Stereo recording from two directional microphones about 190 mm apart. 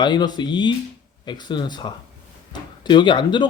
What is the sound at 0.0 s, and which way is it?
Speech, 25° left (ahead or behind).